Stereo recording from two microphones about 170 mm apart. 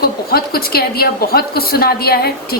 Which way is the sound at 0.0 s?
65° left (ahead or behind).